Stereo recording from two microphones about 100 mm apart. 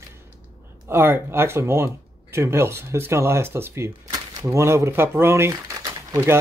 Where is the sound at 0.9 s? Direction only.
25° right (ahead or behind).